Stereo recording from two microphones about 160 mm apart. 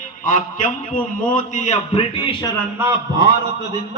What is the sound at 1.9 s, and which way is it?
Speech, 30° left (ahead or behind).